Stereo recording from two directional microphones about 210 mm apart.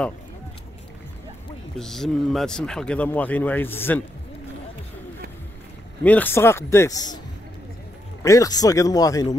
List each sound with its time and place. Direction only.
1.8 s speech: centre (ahead or behind)
6.0 s speech: 10° left (ahead or behind)
8.2 s speech: 15° left (ahead or behind)